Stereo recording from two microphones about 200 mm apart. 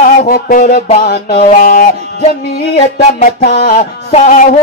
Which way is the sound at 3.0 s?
40° left (ahead or behind).